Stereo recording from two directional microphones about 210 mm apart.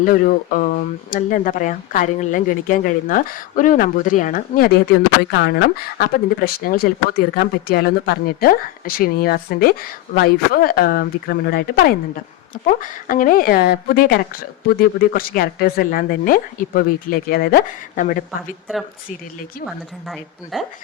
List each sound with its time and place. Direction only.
0.0 s speech: 40° left (ahead or behind)
5.3 s speech: 55° left (ahead or behind)
20.1 s speech: centre (ahead or behind)